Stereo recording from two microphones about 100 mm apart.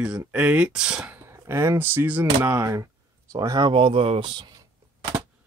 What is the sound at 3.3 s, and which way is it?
Speech, 40° right (ahead or behind).